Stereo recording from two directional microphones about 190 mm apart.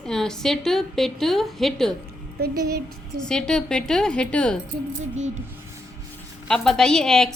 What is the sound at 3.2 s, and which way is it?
A woman's voice, 5° left (ahead or behind).